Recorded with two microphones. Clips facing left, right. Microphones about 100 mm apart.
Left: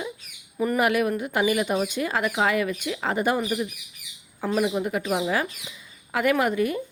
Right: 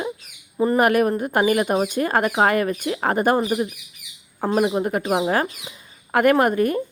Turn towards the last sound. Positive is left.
turn(degrees=-50)  # may be behind; listen again after turning